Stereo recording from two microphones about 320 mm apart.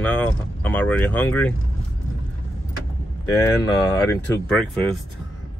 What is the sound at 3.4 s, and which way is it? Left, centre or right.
Speech, centre.